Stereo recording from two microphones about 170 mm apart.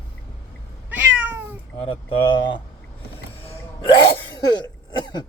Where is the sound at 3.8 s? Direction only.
25° left (ahead or behind).